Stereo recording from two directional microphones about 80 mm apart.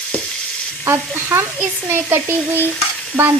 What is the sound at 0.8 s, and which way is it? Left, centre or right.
Frying, right.